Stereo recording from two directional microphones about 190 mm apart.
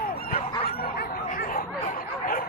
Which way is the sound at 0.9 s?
50° left (ahead or behind).